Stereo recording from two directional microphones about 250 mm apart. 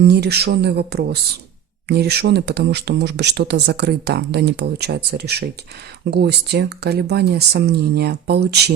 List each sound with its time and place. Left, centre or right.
0.0 s speech: right